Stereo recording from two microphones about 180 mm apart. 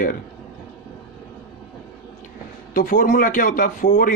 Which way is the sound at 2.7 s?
50° left (ahead or behind).